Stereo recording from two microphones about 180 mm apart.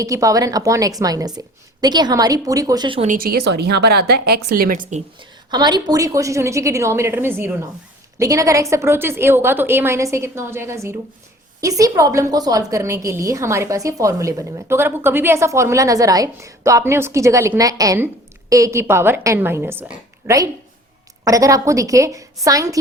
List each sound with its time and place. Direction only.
0.0 s a woman's voice: 20° right (ahead or behind)
3.0 s a woman's voice: 50° right (ahead or behind)
5.2 s a woman's voice: 25° right (ahead or behind)